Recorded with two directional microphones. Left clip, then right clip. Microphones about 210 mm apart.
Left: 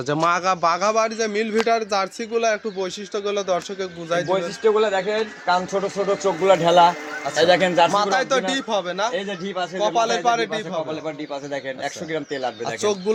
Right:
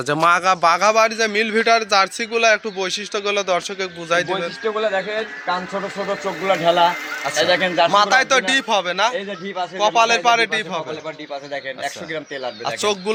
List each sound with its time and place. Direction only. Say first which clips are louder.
0.1 s a man's voice: right 4 dB; centre (ahead or behind)
4.3 s a man's voice: left 3 dB; 55° left (ahead or behind)
7.9 s a man's voice: right 5 dB; centre (ahead or behind)
11.5 s a man's voice: right 2 dB; 55° left (ahead or behind)
12.6 s a man's voice: right 3 dB; 5° left (ahead or behind)